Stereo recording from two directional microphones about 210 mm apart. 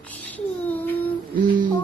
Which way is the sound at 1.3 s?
40° right (ahead or behind).